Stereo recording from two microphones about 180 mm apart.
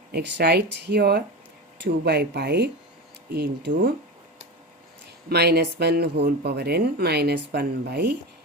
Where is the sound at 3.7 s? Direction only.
55° right (ahead or behind).